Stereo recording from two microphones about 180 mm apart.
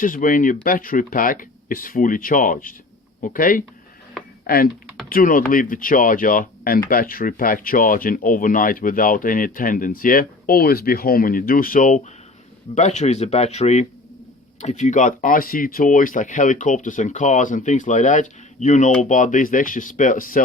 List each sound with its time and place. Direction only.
0.0 s speech: 50° left (ahead or behind)